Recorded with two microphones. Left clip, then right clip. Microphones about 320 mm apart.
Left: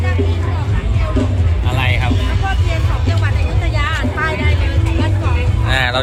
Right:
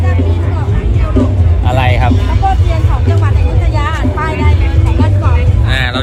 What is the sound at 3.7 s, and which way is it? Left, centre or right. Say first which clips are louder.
Music: right 2 dB; right.